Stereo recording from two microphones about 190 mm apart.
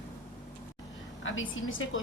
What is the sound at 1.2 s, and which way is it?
Speech, 90° left.